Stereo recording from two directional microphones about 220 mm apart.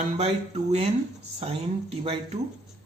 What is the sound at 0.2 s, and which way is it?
Speech, 30° right (ahead or behind).